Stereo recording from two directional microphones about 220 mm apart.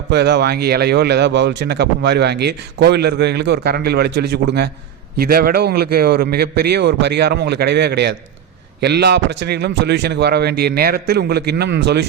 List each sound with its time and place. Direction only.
0.1 s speech: 50° right (ahead or behind)